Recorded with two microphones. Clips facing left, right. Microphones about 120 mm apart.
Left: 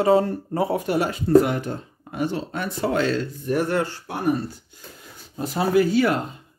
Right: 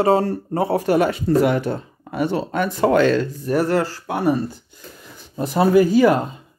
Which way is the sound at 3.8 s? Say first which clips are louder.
Right 6 dB; 90° right.